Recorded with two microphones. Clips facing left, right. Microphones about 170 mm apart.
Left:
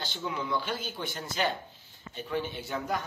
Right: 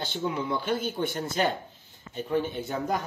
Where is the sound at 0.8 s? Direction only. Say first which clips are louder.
Right 8 dB; 55° right (ahead or behind).